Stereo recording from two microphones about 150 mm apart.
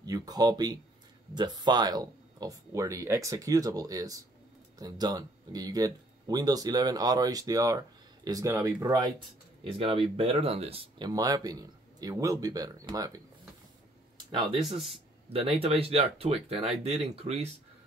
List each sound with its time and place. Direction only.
0.0 s speech: 25° right (ahead or behind)
9.7 s speech: 40° right (ahead or behind)